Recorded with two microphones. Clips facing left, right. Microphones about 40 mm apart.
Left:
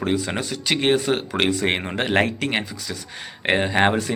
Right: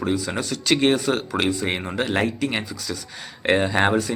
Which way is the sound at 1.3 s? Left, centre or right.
Left.